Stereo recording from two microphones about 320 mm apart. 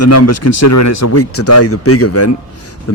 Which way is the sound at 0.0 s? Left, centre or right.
Left.